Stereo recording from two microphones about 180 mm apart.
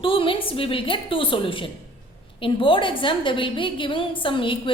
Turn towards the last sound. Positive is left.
turn(degrees=30)  # may be behind; listen again after turning